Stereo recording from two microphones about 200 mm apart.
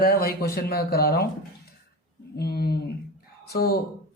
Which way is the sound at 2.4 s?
50° left (ahead or behind).